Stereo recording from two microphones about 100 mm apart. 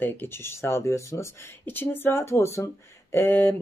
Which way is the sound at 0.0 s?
20° left (ahead or behind).